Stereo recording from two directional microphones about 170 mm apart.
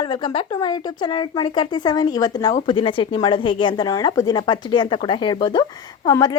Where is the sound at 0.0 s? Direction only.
25° left (ahead or behind).